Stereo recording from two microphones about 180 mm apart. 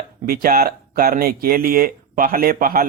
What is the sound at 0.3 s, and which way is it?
Speech, 55° right (ahead or behind).